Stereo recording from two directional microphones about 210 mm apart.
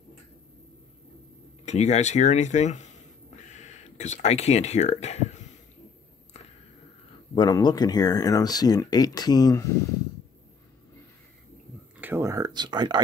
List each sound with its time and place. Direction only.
1.7 s speech: 35° left (ahead or behind)
7.3 s speech: 20° left (ahead or behind)
12.0 s speech: 10° right (ahead or behind)